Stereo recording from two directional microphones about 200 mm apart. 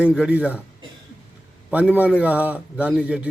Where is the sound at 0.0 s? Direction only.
5° right (ahead or behind).